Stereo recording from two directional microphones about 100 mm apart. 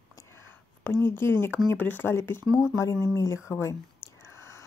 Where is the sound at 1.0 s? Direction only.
25° left (ahead or behind).